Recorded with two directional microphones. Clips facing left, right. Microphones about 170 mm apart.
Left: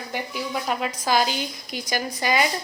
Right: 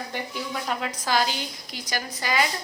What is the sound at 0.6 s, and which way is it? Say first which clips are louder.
A woman's voice: left 3 dB; 15° left (ahead or behind).